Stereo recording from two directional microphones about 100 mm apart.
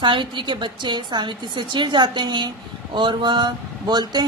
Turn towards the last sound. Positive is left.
turn(degrees=-45)  # may be behind; listen again after turning